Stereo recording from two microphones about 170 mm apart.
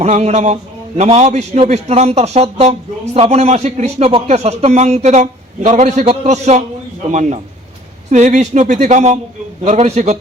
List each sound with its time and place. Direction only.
0.0 s a man's voice: 40° right (ahead or behind)